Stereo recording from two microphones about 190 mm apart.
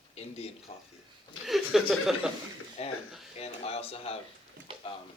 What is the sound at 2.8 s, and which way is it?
Speech, 35° left (ahead or behind).